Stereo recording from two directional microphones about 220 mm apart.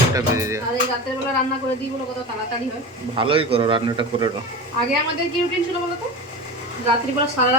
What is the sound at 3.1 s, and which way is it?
Speech, 25° right (ahead or behind).